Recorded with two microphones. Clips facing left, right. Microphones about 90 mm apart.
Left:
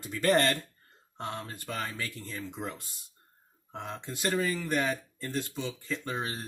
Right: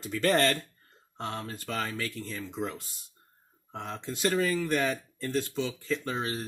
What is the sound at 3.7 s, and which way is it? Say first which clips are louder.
Speech: right 2 dB; 10° left (ahead or behind).